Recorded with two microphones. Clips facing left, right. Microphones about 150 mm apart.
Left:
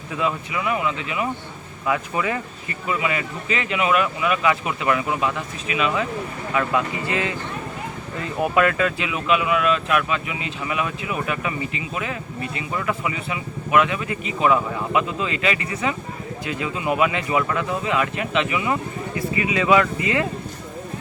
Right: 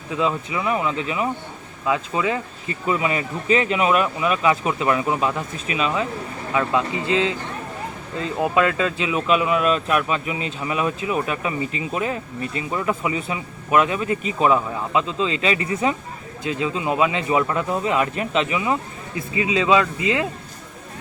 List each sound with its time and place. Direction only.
0.2 s speech: 30° right (ahead or behind)
1.9 s speech: 20° right (ahead or behind)
2.8 s speech: 35° right (ahead or behind); by 20.2 s 20° right (ahead or behind)